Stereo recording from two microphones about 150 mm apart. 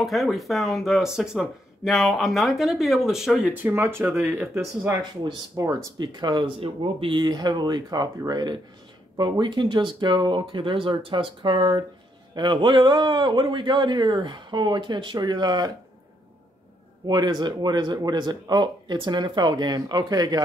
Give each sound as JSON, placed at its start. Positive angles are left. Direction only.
{"t": 0.0, "sound": "speech", "side_deg": 0}
{"t": 5.2, "sound": "speech", "side_deg": -25}
{"t": 17.0, "sound": "speech", "side_deg": -30}